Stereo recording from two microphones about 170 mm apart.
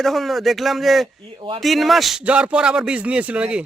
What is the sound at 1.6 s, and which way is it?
A man's voice, centre (ahead or behind).